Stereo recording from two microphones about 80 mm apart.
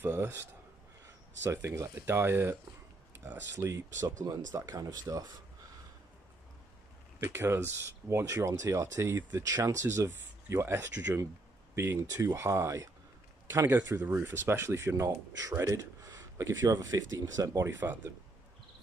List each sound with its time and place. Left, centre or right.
0.0 s a sound: right
1.4 s speech: right
7.2 s speech: right
9.4 s speech: right
15.0 s speech: right
16.9 s speech: right